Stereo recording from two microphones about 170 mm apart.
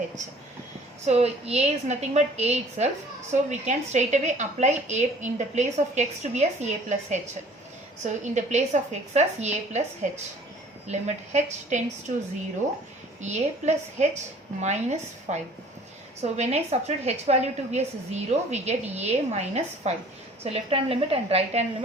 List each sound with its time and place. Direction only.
1.0 s a woman's voice: 40° right (ahead or behind)
11.0 s a woman's voice: 40° right (ahead or behind)